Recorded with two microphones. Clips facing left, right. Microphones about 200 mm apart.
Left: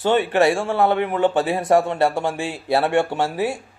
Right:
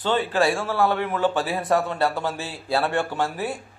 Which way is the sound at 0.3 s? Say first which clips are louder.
Left 4 dB; 25° left (ahead or behind).